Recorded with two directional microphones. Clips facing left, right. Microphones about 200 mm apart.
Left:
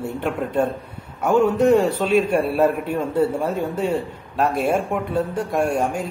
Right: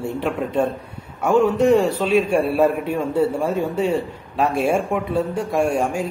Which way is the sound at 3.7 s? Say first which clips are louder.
Right 2 dB; 65° right (ahead or behind).